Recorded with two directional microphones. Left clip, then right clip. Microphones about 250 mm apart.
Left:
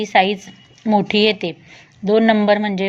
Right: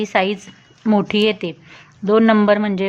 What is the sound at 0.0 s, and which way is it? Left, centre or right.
A woman's voice, centre.